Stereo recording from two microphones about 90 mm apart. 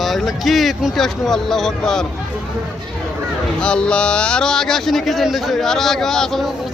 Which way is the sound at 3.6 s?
10° left (ahead or behind).